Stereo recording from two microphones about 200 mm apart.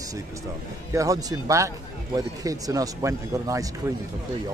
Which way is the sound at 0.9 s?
15° right (ahead or behind).